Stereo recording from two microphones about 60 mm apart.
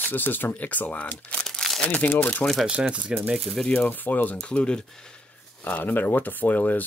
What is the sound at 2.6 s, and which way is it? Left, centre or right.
Speech, centre.